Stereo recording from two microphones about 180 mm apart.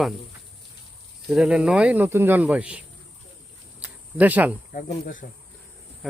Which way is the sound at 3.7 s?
10° right (ahead or behind).